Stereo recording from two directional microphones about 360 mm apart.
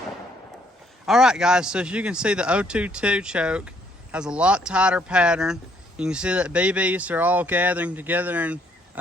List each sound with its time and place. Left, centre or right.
1.0 s speech: centre